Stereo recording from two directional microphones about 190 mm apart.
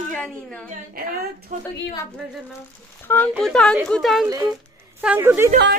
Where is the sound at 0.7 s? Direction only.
50° right (ahead or behind).